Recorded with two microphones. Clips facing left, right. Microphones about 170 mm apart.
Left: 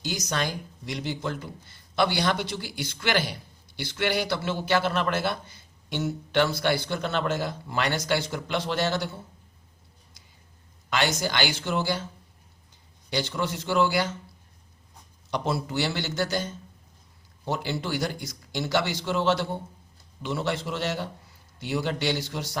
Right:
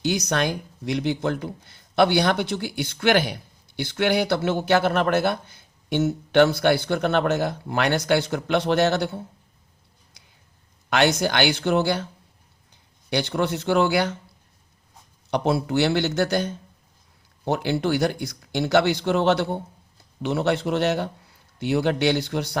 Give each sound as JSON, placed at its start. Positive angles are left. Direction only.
{"t": 0.0, "sound": "a man's voice", "side_deg": -65}
{"t": 10.8, "sound": "a man's voice", "side_deg": -60}
{"t": 13.1, "sound": "a man's voice", "side_deg": -60}
{"t": 15.3, "sound": "a man's voice", "side_deg": -60}